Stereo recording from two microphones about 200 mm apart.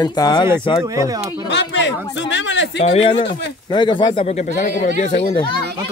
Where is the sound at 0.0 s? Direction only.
20° left (ahead or behind).